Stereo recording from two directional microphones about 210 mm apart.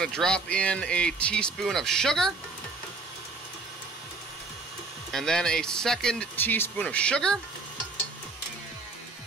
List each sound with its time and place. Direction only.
0.0 s speech: 5° left (ahead or behind)
5.1 s speech: centre (ahead or behind)